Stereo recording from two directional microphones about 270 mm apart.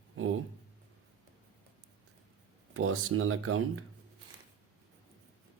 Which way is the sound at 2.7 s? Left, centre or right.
Right.